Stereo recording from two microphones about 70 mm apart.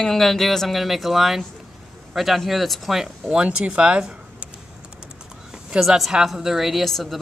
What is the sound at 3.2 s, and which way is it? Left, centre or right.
Speech, centre.